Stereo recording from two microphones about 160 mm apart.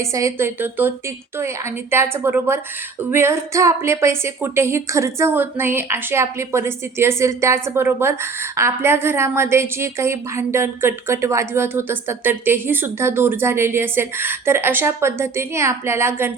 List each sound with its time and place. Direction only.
0.0 s speech: 20° right (ahead or behind)